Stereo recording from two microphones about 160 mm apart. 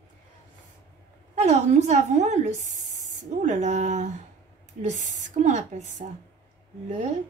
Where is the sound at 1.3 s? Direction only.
45° right (ahead or behind).